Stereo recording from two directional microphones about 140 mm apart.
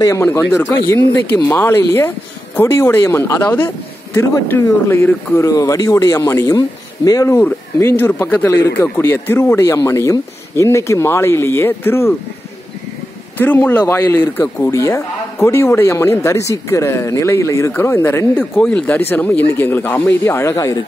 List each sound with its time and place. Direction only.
0.0 s speech: 20° left (ahead or behind)
13.4 s speech: 15° left (ahead or behind)